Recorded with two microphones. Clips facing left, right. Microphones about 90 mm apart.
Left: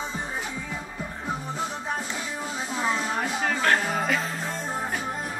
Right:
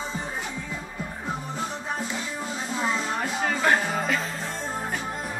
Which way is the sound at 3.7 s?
Centre (ahead or behind).